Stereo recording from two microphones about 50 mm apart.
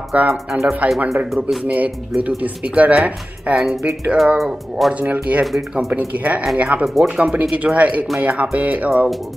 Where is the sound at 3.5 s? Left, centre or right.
Centre.